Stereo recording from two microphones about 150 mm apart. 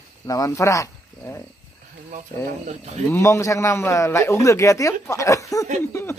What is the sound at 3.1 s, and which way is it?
Speech, 20° left (ahead or behind).